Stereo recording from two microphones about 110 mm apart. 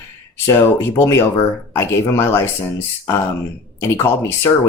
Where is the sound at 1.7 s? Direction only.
25° left (ahead or behind).